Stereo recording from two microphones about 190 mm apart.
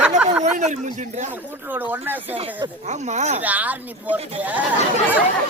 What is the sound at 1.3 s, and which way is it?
Speech, 10° right (ahead or behind).